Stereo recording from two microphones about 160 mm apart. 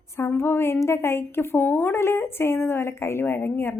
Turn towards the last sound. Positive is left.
turn(degrees=15)  # may be behind; listen again after turning